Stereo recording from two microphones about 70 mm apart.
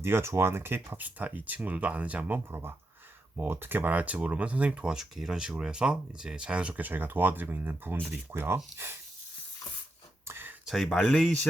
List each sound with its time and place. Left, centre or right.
0.0 s speech: right
10.2 s a sound: right
10.8 s speech: centre